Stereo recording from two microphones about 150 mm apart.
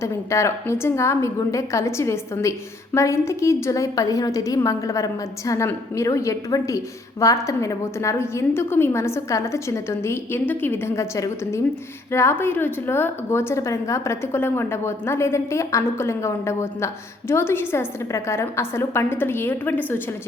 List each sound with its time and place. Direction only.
0.0 s a woman's voice: 20° left (ahead or behind)